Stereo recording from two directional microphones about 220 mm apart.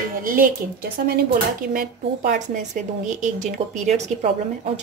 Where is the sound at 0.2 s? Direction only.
40° right (ahead or behind).